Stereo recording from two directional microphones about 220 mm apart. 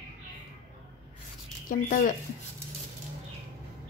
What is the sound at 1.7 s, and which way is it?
Speech, 35° left (ahead or behind).